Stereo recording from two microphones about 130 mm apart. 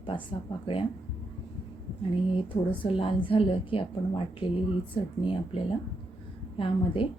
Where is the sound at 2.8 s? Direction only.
45° left (ahead or behind).